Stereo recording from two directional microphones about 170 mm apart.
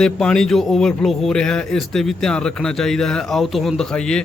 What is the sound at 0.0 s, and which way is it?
A man's voice, 5° left (ahead or behind).